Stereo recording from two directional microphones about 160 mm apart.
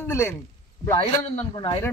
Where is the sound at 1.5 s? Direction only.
30° left (ahead or behind).